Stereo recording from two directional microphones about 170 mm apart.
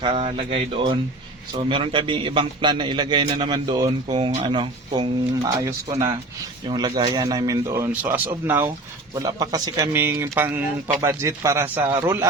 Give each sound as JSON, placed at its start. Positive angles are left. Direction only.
{"t": 0.0, "sound": "a man's voice", "side_deg": -30}
{"t": 5.9, "sound": "a man's voice", "side_deg": -30}